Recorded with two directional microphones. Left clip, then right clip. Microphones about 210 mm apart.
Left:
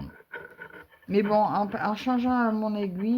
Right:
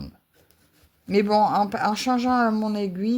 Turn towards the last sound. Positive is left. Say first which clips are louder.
# right 3 dB
turn(degrees=-30)  # may be behind; listen again after turning